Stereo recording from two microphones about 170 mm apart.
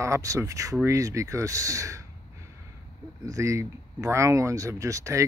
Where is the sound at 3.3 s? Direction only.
15° right (ahead or behind).